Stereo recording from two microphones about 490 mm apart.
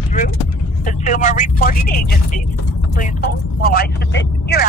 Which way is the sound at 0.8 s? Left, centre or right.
Centre.